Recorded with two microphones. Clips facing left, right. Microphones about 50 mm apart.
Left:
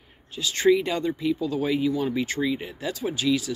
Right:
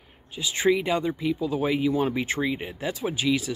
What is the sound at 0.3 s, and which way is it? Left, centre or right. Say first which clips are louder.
Speech: left 3 dB; centre.